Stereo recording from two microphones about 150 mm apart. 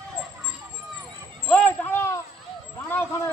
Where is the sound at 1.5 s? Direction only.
10° left (ahead or behind).